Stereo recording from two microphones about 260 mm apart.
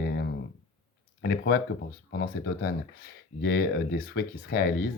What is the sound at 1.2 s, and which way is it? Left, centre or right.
Speech, left.